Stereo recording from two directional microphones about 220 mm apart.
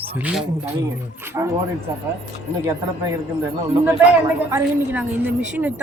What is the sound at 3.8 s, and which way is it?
A woman's voice, 10° right (ahead or behind).